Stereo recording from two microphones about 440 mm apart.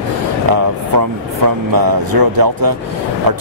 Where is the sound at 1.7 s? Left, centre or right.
Right.